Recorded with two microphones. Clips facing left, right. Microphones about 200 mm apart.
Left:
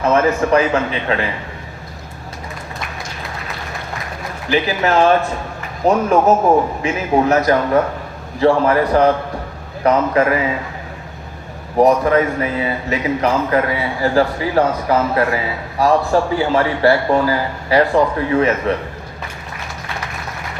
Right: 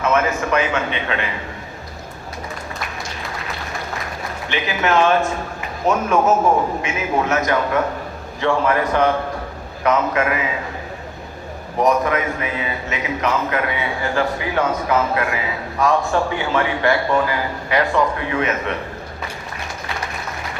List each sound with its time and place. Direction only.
0.0 s a man's voice: 35° left (ahead or behind)
4.4 s a man's voice: 35° left (ahead or behind)
11.8 s a man's voice: 35° left (ahead or behind)